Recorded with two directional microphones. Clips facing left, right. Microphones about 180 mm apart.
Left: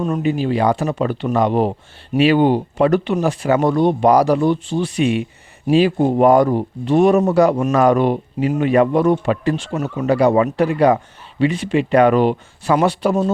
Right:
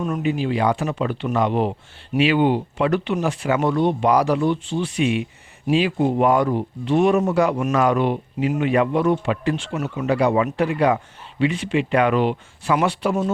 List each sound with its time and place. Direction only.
0.0 s speech: 35° left (ahead or behind)